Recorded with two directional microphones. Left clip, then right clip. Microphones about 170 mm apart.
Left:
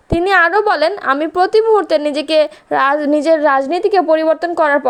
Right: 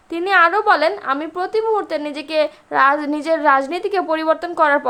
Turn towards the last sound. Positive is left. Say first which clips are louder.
# left 3 dB
turn(degrees=25)  # may be behind; listen again after turning